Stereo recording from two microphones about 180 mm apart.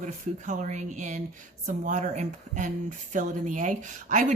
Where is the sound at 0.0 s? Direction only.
45° right (ahead or behind).